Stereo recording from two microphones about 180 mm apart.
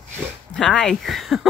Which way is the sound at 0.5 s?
5° left (ahead or behind).